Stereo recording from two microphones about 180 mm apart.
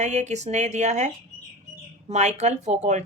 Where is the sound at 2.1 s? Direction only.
40° right (ahead or behind).